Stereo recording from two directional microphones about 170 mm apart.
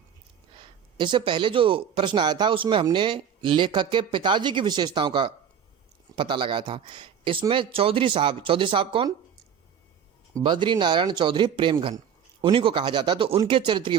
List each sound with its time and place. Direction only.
0.9 s speech: 30° right (ahead or behind)
10.3 s speech: 25° right (ahead or behind)